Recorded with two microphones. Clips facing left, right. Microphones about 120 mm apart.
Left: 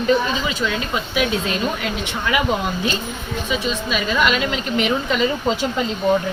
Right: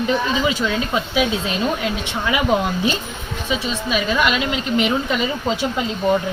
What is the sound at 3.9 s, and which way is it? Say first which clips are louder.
A woman's voice: right 1 dB; 20° right (ahead or behind).